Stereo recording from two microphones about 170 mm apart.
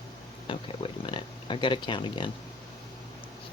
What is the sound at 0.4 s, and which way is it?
Speech, 30° left (ahead or behind).